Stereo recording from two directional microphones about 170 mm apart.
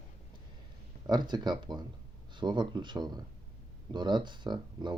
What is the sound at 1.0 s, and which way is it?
Speech, 25° right (ahead or behind).